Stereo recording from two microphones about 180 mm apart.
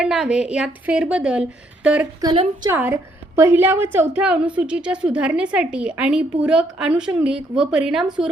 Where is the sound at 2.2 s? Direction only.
25° right (ahead or behind).